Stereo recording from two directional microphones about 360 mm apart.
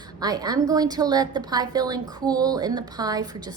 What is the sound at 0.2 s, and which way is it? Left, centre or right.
A woman's voice, centre.